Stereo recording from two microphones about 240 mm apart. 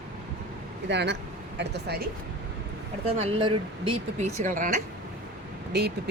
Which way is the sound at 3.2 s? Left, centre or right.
Right.